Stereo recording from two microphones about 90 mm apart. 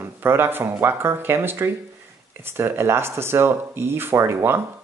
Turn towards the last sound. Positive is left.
turn(degrees=-30)  # may be behind; listen again after turning